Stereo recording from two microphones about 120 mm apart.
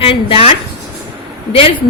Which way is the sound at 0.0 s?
50° left (ahead or behind).